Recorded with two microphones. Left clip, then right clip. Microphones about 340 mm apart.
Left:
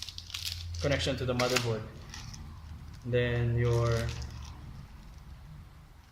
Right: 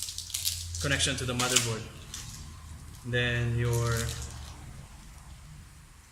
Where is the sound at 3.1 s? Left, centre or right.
Centre.